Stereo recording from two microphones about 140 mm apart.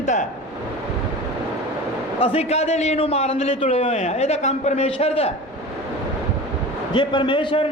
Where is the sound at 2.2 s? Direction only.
45° left (ahead or behind).